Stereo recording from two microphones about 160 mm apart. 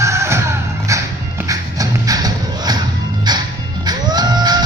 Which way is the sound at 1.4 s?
20° right (ahead or behind).